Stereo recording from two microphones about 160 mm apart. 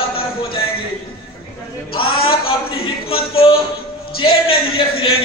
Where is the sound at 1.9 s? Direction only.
35° left (ahead or behind).